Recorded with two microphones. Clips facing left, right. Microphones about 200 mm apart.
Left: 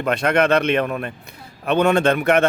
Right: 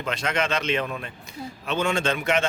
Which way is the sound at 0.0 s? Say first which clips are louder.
Left 8 dB; 60° left (ahead or behind).